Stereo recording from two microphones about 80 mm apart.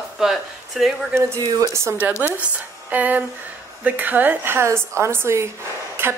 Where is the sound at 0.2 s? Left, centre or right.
Centre.